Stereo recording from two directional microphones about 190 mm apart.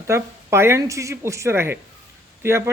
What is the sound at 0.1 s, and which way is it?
A man's voice, 15° right (ahead or behind).